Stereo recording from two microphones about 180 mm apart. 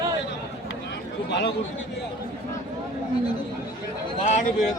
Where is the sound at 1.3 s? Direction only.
70° left (ahead or behind).